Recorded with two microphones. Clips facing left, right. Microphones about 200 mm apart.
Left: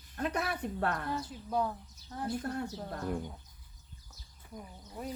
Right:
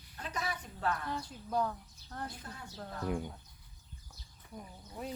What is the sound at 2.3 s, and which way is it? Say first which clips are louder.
Speech: left 13 dB; 60° left (ahead or behind).